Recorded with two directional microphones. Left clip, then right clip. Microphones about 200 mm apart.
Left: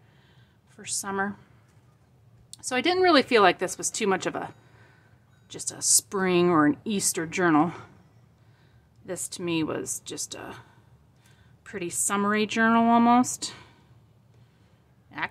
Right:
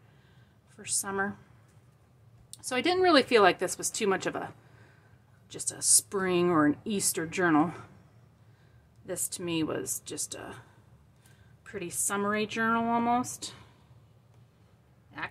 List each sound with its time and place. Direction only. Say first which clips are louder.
0.7 s speech: left 2 dB; 10° left (ahead or behind)
2.5 s speech: left 3 dB; 10° left (ahead or behind)
9.0 s speech: left 3 dB; 10° left (ahead or behind)
11.6 s speech: left 4 dB; 20° left (ahead or behind)